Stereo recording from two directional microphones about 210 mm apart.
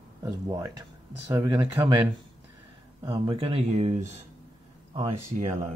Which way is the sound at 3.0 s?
25° right (ahead or behind).